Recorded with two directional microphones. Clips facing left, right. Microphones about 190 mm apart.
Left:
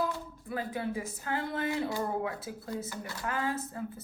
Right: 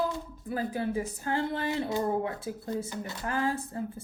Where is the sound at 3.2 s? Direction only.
30° right (ahead or behind).